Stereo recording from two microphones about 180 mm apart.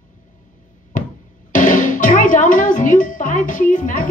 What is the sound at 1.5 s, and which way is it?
Music, 45° left (ahead or behind).